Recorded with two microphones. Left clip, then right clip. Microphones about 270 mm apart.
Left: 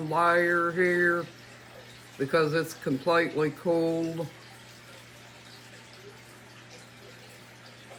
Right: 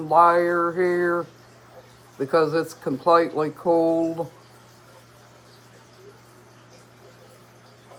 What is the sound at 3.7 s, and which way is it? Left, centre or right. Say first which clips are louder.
Speech: right 8 dB; centre.